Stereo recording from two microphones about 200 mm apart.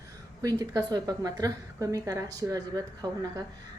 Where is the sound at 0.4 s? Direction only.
20° right (ahead or behind).